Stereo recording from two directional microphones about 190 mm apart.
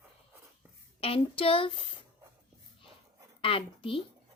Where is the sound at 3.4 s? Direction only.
30° left (ahead or behind).